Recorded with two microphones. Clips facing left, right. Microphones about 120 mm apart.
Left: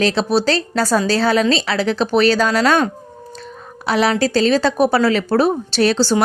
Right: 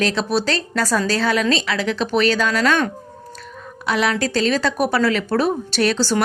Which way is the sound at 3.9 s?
35° left (ahead or behind).